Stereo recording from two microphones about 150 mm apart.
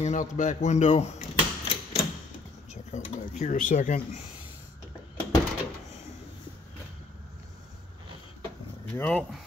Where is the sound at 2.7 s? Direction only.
50° left (ahead or behind).